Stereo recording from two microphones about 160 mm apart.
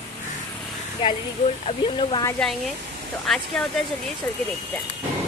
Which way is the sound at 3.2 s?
5° left (ahead or behind).